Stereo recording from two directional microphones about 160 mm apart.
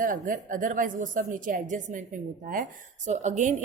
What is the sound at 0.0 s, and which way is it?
A woman's voice, 55° right (ahead or behind).